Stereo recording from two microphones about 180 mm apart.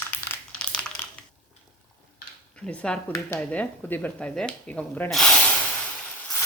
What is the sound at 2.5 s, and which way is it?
Speech, 5° left (ahead or behind).